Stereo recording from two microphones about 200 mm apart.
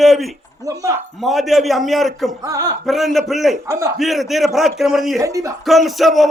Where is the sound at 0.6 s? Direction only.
15° right (ahead or behind).